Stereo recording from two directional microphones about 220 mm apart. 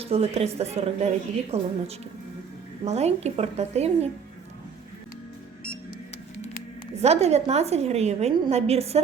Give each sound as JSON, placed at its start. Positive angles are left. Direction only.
{"t": 0.0, "sound": "a woman's voice", "side_deg": -25}
{"t": 6.9, "sound": "a woman's voice", "side_deg": -30}